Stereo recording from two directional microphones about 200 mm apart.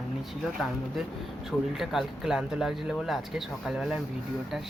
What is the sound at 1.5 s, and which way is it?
Speech, centre (ahead or behind).